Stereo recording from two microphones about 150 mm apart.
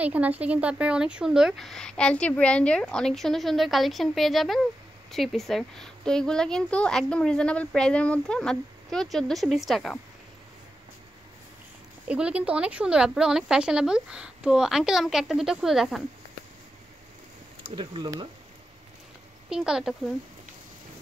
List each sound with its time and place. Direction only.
0.0 s a woman's voice: 10° right (ahead or behind)
12.1 s a woman's voice: 10° right (ahead or behind)
17.6 s speech: 35° right (ahead or behind)
19.5 s a woman's voice: 5° right (ahead or behind)